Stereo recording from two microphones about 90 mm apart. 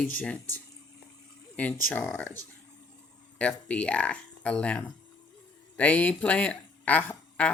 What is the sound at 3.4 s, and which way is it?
A woman's voice, 10° left (ahead or behind).